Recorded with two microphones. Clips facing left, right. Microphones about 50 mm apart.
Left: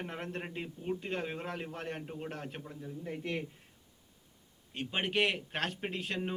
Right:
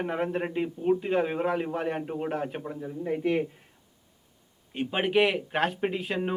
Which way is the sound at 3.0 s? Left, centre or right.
Centre.